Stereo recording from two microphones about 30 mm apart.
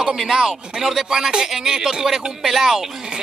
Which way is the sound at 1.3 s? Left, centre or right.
Right.